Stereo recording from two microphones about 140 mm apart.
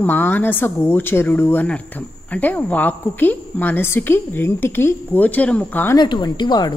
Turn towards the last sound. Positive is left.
turn(degrees=30)  # may be behind; listen again after turning